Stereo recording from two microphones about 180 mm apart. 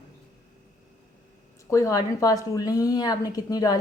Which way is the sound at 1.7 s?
20° left (ahead or behind).